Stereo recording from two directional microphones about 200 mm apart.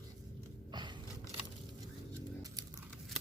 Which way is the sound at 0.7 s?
20° right (ahead or behind).